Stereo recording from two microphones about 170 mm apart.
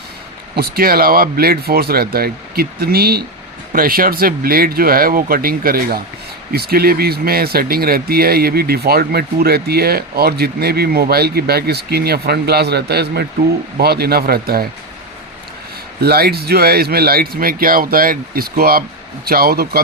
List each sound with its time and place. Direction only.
0.5 s speech: 65° right (ahead or behind)
16.0 s speech: 65° right (ahead or behind)